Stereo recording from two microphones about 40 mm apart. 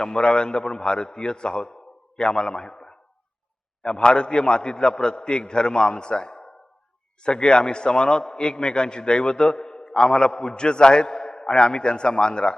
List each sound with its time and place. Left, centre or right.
0.0 s a man's voice: left